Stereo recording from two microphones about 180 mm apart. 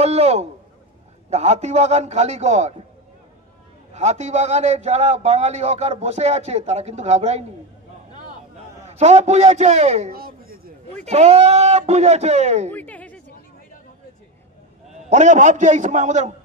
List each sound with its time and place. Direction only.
0.0 s a man's voice: 35° right (ahead or behind)
3.9 s a man's voice: 40° right (ahead or behind)
8.8 s a man's voice: 40° right (ahead or behind)
10.1 s a sound: 55° right (ahead or behind)
11.1 s a man's voice: 35° right (ahead or behind)
12.7 s speech: 10° left (ahead or behind)
15.0 s a man's voice: 40° right (ahead or behind)